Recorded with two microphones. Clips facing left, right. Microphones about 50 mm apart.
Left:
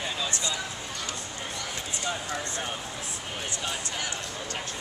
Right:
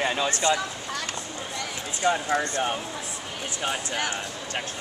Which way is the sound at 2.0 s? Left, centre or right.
Right.